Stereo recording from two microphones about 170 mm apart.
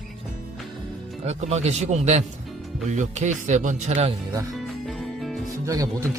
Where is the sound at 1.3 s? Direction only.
40° right (ahead or behind).